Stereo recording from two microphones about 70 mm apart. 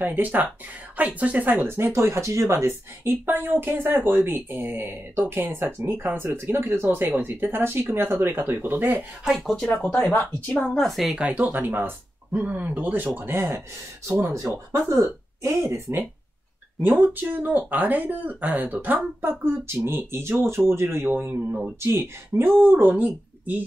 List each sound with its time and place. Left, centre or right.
0.0 s speech: right
9.2 s a woman's voice: centre
9.8 s speech: centre
10.0 s speech: left
10.6 s a woman's voice: centre
11.1 s speech: right
16.8 s speech: right